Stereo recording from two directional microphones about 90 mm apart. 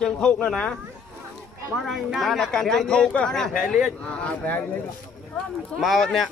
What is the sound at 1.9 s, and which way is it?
Speech, centre (ahead or behind).